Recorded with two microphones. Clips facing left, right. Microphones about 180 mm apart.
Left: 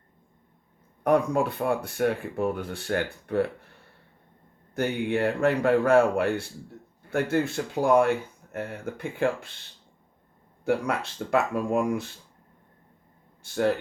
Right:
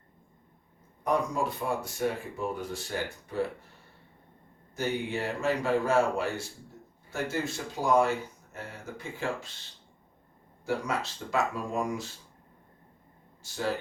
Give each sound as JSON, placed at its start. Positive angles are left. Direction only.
{"t": 1.0, "sound": "speech", "side_deg": 60}
{"t": 4.7, "sound": "speech", "side_deg": 60}
{"t": 10.7, "sound": "speech", "side_deg": 60}
{"t": 13.4, "sound": "speech", "side_deg": 60}